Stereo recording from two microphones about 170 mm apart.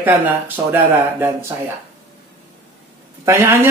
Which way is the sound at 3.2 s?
15° right (ahead or behind).